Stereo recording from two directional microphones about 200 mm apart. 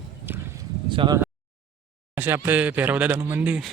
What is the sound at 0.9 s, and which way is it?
Speech, 20° right (ahead or behind).